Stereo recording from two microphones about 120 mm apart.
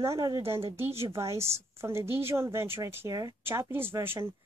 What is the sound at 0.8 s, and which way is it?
Speech, 55° right (ahead or behind).